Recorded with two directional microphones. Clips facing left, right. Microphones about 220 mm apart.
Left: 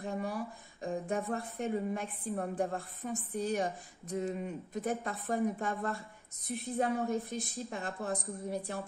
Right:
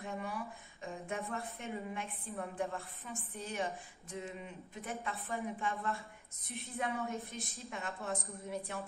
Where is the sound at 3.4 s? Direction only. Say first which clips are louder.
Left 6 dB; 35° left (ahead or behind).